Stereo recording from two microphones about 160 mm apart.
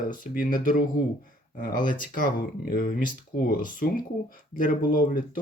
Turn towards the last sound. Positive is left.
turn(degrees=60)  # may be behind; listen again after turning